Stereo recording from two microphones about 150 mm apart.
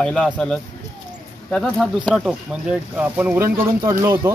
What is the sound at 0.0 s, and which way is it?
Speech, 5° left (ahead or behind).